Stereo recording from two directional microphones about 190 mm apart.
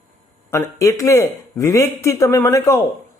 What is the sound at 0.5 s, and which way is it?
Speech, 15° left (ahead or behind).